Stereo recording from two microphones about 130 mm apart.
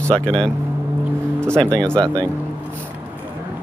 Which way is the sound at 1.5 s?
5° left (ahead or behind).